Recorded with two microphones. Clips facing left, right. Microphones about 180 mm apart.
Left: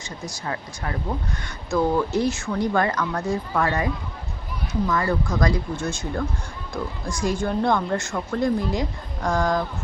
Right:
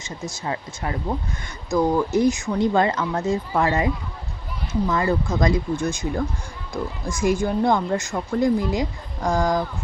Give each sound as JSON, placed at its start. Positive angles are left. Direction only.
{"t": 0.3, "sound": "speech", "side_deg": -20}